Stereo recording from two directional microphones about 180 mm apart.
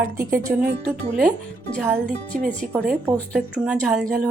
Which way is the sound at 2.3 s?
Centre (ahead or behind).